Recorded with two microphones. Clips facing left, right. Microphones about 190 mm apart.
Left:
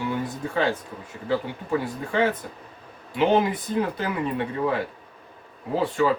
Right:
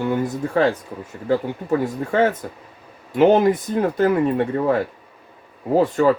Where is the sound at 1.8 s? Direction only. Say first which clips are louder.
Right 5 dB; 45° right (ahead or behind).